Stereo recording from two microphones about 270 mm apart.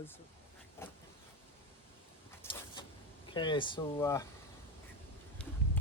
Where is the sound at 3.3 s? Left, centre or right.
Centre.